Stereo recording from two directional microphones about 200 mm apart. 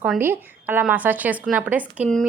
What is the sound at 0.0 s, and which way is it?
A woman's voice, 10° right (ahead or behind).